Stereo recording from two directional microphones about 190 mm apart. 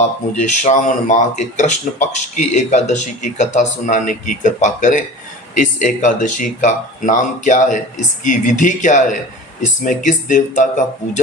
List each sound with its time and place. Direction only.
0.3 s speech: 40° left (ahead or behind)